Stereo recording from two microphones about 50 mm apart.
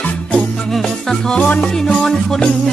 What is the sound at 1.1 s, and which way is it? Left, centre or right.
Music, centre.